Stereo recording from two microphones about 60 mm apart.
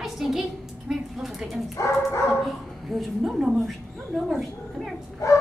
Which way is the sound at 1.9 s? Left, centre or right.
Left.